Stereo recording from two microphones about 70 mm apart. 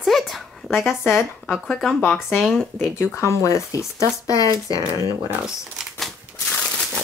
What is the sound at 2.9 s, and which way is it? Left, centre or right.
Speech, left.